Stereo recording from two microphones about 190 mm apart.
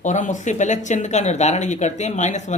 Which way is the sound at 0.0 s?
40° left (ahead or behind).